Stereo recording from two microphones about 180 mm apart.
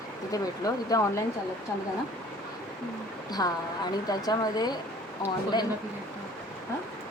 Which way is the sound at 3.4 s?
20° left (ahead or behind).